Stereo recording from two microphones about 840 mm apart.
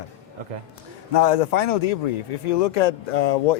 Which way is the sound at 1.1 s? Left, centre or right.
Left.